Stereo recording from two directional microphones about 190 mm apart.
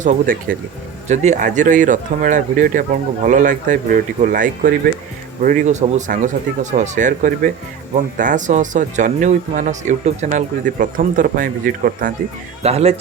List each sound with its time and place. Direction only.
0.0 s speech: 45° right (ahead or behind)
12.6 s speech: 35° right (ahead or behind)